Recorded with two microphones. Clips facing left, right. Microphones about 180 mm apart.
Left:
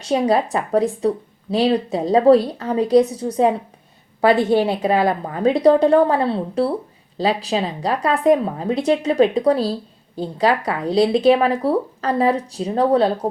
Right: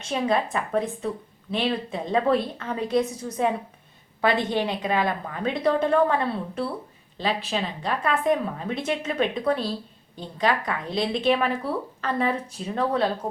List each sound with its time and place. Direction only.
0.1 s a woman's voice: 35° left (ahead or behind)
3.1 s a woman's voice: 65° left (ahead or behind)
4.2 s a woman's voice: 40° left (ahead or behind)